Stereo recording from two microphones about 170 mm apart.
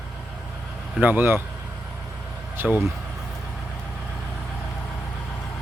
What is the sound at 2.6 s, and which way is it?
Speech, 10° right (ahead or behind).